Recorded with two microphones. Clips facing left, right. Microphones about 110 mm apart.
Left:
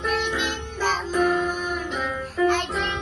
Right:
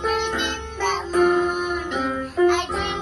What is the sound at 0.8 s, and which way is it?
Music, centre (ahead or behind).